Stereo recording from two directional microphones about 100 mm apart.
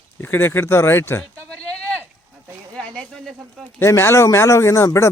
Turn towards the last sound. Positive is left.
turn(degrees=30)  # may be behind; listen again after turning